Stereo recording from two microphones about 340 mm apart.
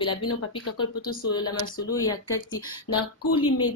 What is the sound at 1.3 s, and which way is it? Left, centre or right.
Speech, centre.